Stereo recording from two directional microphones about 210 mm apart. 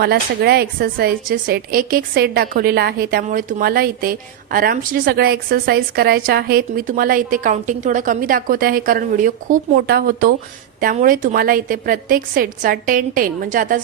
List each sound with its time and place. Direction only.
0.0 s a woman's voice: 50° right (ahead or behind)